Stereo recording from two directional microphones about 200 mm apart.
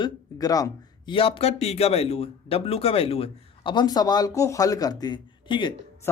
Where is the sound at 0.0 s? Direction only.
20° left (ahead or behind).